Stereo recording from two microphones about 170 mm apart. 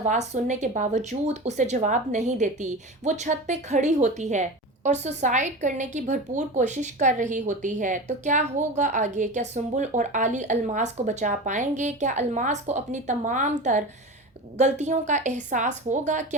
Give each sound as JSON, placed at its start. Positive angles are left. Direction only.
{"t": 0.0, "sound": "speech", "side_deg": -45}